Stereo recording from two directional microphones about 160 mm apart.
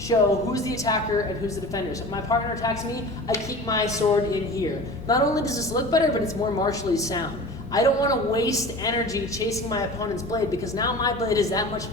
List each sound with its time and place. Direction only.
0.1 s a woman's voice: 25° left (ahead or behind)
2.3 s a woman's voice: 25° left (ahead or behind)